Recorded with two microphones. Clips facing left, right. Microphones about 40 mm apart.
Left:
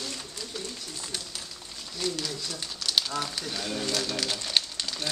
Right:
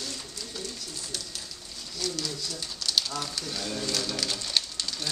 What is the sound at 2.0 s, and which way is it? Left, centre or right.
Speech, left.